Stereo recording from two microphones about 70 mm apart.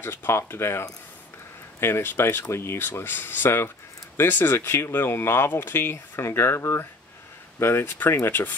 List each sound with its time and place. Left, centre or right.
0.0 s speech: left